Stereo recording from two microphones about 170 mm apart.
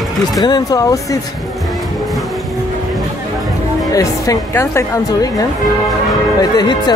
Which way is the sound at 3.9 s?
20° left (ahead or behind).